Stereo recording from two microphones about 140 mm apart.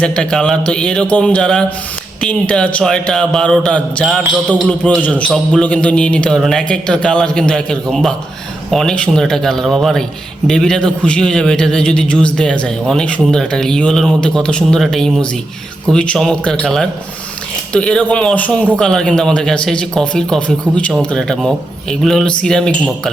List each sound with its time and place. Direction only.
0.0 s a man's voice: 5° left (ahead or behind)